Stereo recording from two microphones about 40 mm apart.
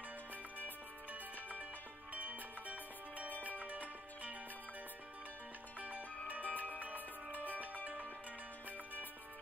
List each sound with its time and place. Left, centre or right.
1.1 s music: right
5.8 s music: right
6.5 s music: left
6.8 s music: right
7.3 s music: left
7.6 s music: right